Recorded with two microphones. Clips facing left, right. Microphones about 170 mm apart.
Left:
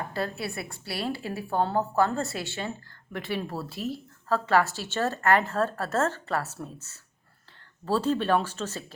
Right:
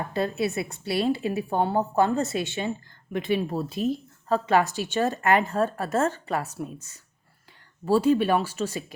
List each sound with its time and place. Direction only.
0.1 s a woman's voice: 20° right (ahead or behind)